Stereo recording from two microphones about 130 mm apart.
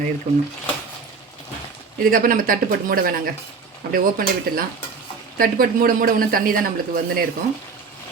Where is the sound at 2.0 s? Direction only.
90° right.